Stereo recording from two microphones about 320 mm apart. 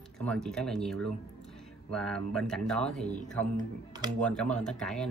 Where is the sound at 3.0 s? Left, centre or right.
Left.